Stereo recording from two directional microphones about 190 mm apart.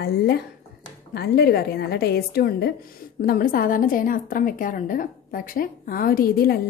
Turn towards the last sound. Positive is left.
turn(degrees=55)  # may be behind; listen again after turning